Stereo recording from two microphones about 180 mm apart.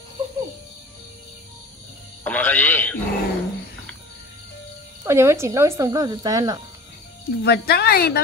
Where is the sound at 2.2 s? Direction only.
10° left (ahead or behind).